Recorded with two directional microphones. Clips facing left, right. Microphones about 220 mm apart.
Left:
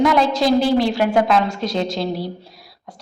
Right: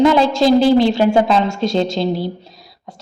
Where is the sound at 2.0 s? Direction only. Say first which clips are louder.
Right 4 dB; centre (ahead or behind).